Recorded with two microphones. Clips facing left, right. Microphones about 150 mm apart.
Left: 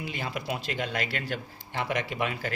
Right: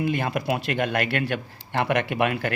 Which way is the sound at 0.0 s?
55° right (ahead or behind).